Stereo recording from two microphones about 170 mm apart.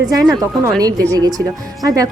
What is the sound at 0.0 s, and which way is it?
Speech, 20° right (ahead or behind).